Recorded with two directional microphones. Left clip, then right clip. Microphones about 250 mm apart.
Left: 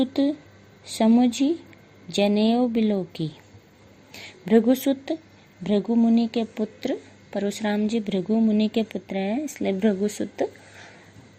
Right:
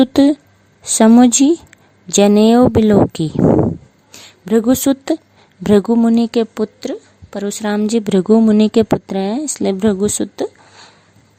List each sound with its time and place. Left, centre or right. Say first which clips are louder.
0.0 s a woman's voice: right 12 dB; right
4.1 s a sound: right 4 dB; right
4.8 s a woman's voice: right 9 dB; right